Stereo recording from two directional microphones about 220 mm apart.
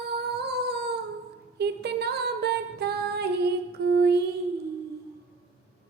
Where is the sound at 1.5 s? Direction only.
50° right (ahead or behind).